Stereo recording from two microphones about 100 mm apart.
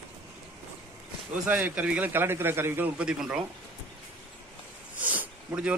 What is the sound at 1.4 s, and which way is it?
A man's voice, 15° right (ahead or behind).